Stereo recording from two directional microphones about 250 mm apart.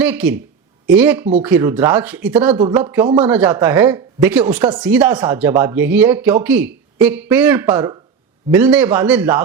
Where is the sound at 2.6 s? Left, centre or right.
Centre.